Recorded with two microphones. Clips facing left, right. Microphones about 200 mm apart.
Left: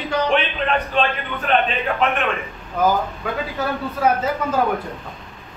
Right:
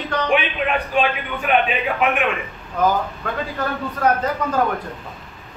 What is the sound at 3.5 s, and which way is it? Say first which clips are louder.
Speech: left 1 dB; 5° left (ahead or behind).